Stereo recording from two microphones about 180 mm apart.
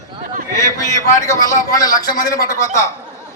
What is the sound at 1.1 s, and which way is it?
A man's voice, 20° left (ahead or behind).